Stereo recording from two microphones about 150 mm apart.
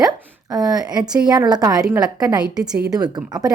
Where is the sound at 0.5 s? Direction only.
25° right (ahead or behind).